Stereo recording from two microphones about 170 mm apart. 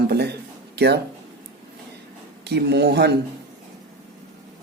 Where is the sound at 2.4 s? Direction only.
80° right.